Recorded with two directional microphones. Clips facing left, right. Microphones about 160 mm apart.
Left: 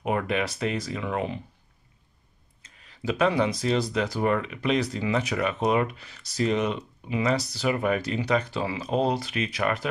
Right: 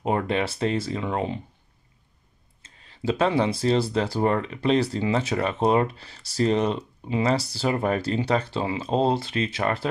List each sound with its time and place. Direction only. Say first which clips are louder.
0.0 s speech: right 2 dB; 30° right (ahead or behind)
2.6 s speech: right 3 dB; 30° right (ahead or behind)